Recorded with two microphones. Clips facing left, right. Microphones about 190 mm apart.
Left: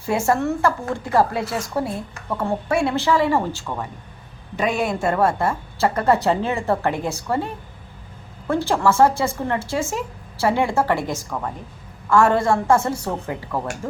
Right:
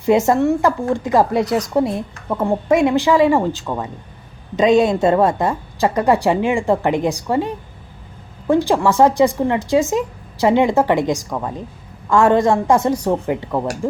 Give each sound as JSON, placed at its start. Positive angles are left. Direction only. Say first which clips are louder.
{"t": 0.0, "sound": "a woman's voice", "louder": "right 6 dB", "side_deg": -20}